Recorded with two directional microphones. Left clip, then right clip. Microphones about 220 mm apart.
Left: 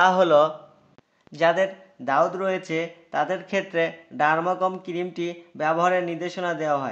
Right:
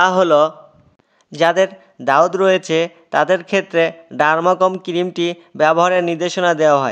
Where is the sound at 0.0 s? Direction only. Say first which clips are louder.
Right 5 dB; 35° right (ahead or behind).